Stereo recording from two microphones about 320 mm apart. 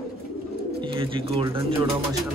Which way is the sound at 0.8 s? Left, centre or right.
Centre.